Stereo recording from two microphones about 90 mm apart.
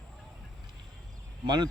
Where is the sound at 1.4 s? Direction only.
50° right (ahead or behind).